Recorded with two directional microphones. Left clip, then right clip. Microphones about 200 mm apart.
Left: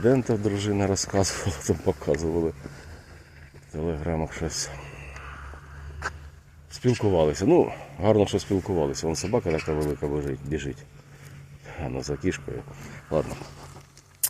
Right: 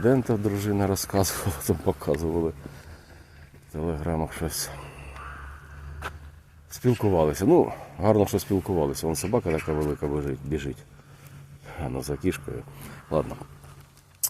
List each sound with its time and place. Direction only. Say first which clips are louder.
0.0 s speech: left 1 dB; 10° right (ahead or behind)
3.8 s speech: even; 15° right (ahead or behind)
6.7 s speech: even; 15° right (ahead or behind)
12.9 s a sound: even; 15° right (ahead or behind)